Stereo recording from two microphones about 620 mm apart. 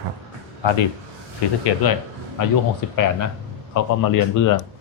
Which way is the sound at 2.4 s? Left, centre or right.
Left.